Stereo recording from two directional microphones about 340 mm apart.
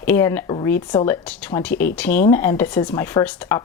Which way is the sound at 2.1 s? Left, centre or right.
Left.